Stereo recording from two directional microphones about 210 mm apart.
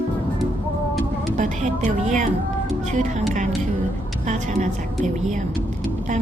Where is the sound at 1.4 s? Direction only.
35° right (ahead or behind).